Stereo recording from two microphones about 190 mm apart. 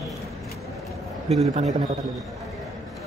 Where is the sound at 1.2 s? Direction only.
35° right (ahead or behind).